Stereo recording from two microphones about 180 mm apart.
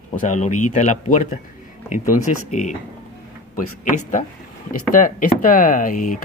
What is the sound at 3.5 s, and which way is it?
A man's voice, 45° left (ahead or behind).